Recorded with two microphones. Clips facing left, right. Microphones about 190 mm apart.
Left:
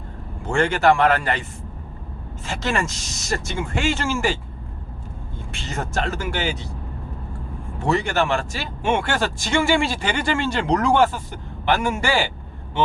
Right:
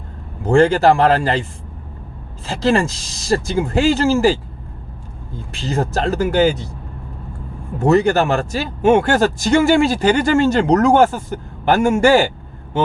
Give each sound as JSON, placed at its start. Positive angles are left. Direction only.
{"t": 0.4, "sound": "speech", "side_deg": -35}
{"t": 2.5, "sound": "speech", "side_deg": -35}
{"t": 5.5, "sound": "speech", "side_deg": -35}
{"t": 7.8, "sound": "speech", "side_deg": -40}